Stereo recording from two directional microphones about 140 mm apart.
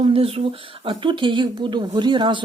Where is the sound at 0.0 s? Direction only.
40° right (ahead or behind).